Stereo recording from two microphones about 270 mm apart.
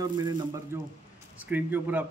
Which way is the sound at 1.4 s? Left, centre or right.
Centre.